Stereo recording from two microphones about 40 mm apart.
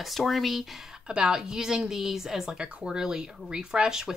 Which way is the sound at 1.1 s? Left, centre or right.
Centre.